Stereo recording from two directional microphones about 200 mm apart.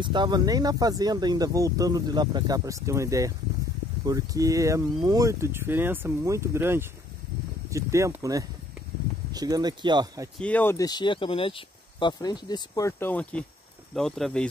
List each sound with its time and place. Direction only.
0.0 s speech: 25° right (ahead or behind)
10.4 s speech: 10° left (ahead or behind)